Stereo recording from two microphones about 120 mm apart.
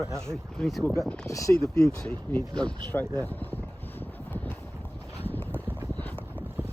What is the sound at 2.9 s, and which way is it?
Vehicle, 15° left (ahead or behind).